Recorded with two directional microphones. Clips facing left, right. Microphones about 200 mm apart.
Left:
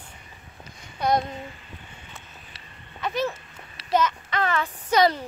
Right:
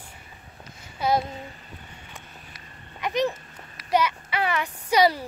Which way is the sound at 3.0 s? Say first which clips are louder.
Right 2 dB; 15° right (ahead or behind).